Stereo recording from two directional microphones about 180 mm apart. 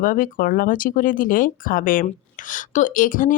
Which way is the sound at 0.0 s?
50° left (ahead or behind).